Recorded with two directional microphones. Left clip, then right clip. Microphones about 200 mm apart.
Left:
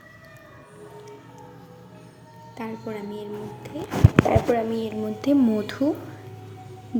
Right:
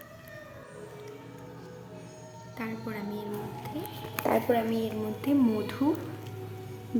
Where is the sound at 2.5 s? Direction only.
10° left (ahead or behind).